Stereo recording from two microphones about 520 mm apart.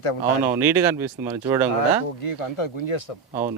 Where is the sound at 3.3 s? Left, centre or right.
Centre.